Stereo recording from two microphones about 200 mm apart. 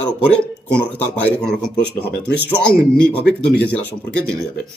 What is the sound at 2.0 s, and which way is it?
Speech, 50° left (ahead or behind).